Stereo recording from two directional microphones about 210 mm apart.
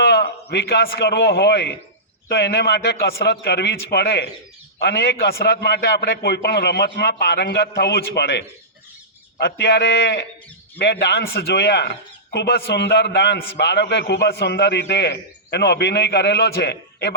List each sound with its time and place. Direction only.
0.0 s a man's voice: 50° left (ahead or behind)